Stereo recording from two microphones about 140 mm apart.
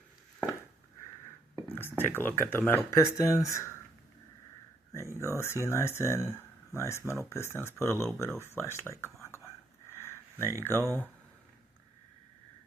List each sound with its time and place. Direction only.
1.5 s speech: 15° left (ahead or behind)
4.9 s speech: 20° left (ahead or behind)
10.0 s a sound: 20° left (ahead or behind)
10.7 s speech: 20° right (ahead or behind)